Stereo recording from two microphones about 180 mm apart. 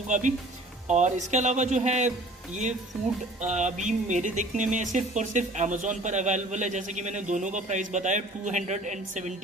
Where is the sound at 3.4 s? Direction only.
40° right (ahead or behind).